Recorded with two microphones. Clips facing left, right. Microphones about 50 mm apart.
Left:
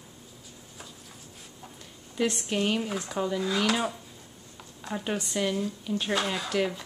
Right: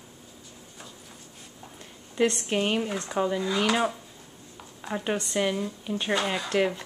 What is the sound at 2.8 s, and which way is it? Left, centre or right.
Speech, centre.